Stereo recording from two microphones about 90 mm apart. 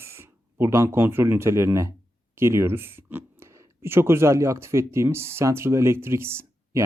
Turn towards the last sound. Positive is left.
turn(degrees=-30)  # may be behind; listen again after turning